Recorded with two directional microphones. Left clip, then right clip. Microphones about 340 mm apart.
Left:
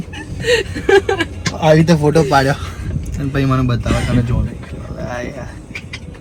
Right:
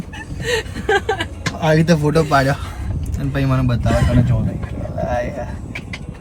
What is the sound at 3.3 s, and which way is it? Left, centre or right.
Speech, centre.